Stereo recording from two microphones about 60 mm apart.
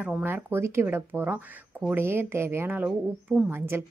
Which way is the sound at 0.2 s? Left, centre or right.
Right.